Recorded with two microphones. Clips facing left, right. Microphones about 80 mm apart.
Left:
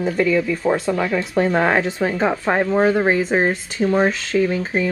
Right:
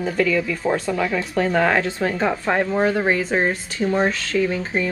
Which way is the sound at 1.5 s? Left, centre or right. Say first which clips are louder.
Right 1 dB; centre.